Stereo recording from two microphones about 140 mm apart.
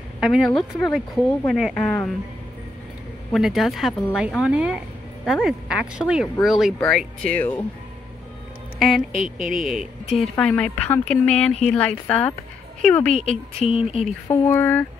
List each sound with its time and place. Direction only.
0.2 s a woman's voice: centre (ahead or behind)
3.3 s a woman's voice: centre (ahead or behind)
8.7 s music: centre (ahead or behind)
9.4 s a woman's voice: centre (ahead or behind)
10.3 s speech: 10° left (ahead or behind)
13.3 s speech: 45° left (ahead or behind)
14.2 s speech: 15° left (ahead or behind)